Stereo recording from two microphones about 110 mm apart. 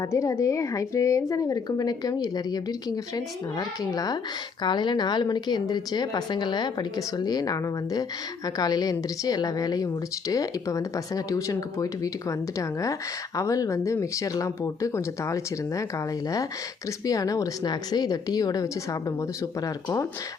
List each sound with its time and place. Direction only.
0.0 s a woman's voice: 25° left (ahead or behind)
17.1 s a woman's voice: 30° left (ahead or behind)